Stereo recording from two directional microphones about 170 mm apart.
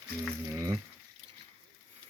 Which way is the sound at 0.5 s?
20° right (ahead or behind).